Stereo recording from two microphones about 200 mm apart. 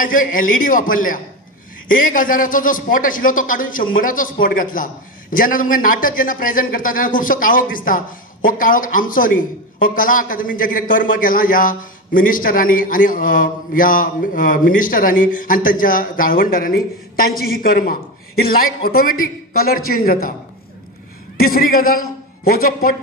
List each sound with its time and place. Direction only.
0.0 s a man's voice: 45° left (ahead or behind)
21.4 s a man's voice: 45° left (ahead or behind)